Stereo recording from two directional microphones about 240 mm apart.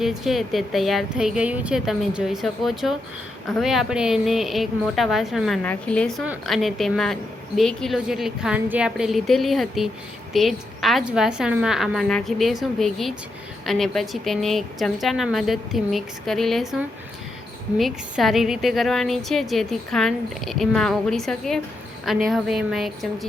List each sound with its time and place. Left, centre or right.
0.0 s a woman's voice: centre